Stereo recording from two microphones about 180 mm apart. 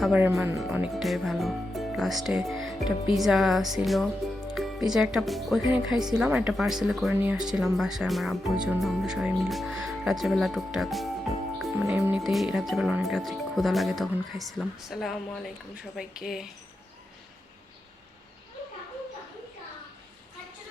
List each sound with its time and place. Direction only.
0.0 s speech: 10° right (ahead or behind)
0.6 s speech: centre (ahead or behind)
11.6 s music: centre (ahead or behind)
11.9 s speech: 10° right (ahead or behind)
12.2 s speech: centre (ahead or behind)